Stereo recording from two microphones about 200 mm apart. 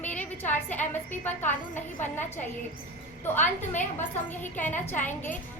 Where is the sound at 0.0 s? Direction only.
10° left (ahead or behind).